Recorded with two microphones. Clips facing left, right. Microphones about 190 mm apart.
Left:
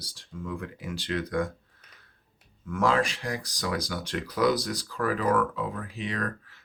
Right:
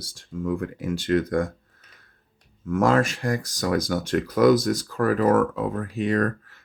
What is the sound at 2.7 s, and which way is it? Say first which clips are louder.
Speech: right 5 dB; 45° right (ahead or behind).